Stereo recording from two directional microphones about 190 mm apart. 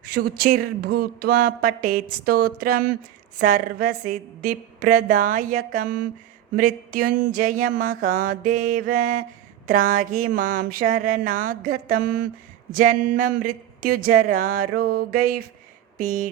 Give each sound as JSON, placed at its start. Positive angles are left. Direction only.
{"t": 0.1, "sound": "speech", "side_deg": -55}